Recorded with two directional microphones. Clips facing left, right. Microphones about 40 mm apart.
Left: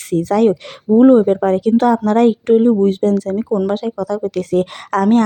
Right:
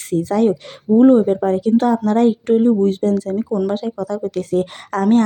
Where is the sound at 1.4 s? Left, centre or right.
Left.